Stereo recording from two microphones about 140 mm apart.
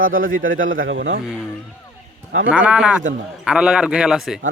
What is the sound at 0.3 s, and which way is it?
Speech, 75° right (ahead or behind).